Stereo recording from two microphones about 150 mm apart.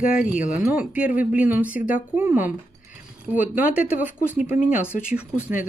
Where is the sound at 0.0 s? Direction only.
65° left (ahead or behind).